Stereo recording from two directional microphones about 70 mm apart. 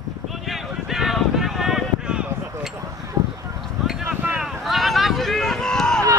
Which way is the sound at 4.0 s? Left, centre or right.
Right.